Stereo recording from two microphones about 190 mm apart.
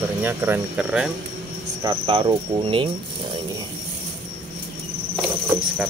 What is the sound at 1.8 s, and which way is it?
Cricket, 25° right (ahead or behind).